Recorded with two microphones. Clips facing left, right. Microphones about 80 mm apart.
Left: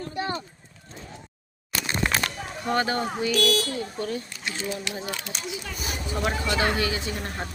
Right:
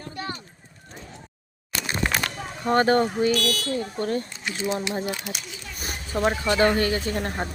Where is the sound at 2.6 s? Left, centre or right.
Right.